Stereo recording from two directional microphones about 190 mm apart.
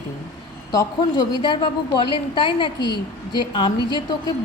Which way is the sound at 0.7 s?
20° left (ahead or behind).